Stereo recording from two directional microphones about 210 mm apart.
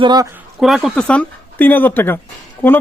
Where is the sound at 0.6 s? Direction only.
Centre (ahead or behind).